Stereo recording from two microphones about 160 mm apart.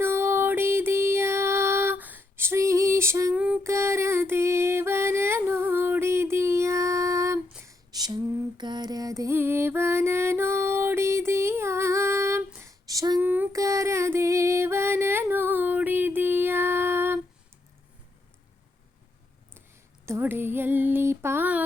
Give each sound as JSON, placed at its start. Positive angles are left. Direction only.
{"t": 0.0, "sound": "music", "side_deg": -15}
{"t": 7.6, "sound": "lullaby", "side_deg": -20}
{"t": 20.1, "sound": "a sound", "side_deg": -15}